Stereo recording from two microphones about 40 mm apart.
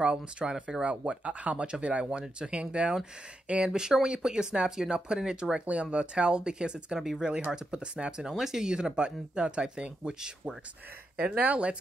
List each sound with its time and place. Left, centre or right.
0.0 s speech: right
3.7 s speech: centre
7.0 s speech: centre
7.5 s speech: right
8.3 s speech: centre
11.1 s speech: right